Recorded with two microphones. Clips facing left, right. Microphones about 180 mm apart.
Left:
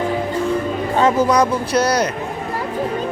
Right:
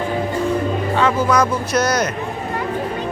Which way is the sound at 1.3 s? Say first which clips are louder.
Left 1 dB; 35° left (ahead or behind).